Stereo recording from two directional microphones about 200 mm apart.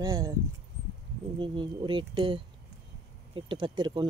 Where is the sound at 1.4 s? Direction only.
25° right (ahead or behind).